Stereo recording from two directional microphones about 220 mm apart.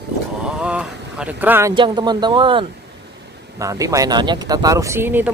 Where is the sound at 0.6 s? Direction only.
5° right (ahead or behind).